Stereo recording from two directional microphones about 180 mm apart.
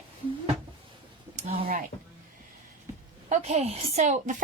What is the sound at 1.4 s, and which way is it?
Speech, 30° right (ahead or behind).